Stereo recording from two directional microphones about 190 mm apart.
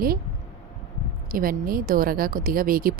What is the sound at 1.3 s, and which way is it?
A woman's voice, 50° right (ahead or behind).